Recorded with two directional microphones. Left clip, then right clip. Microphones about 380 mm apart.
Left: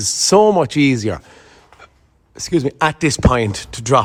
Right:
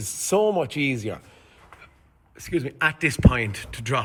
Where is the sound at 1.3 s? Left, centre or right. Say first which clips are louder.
Left 6 dB; left.